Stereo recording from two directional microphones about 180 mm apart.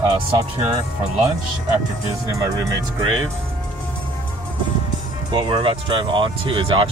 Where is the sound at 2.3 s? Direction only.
20° right (ahead or behind).